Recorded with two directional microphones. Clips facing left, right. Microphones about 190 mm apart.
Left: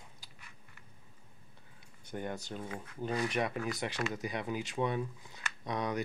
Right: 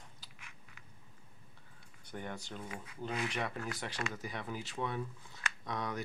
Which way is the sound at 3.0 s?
15° left (ahead or behind).